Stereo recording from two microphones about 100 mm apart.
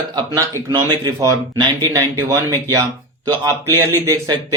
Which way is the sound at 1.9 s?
30° right (ahead or behind).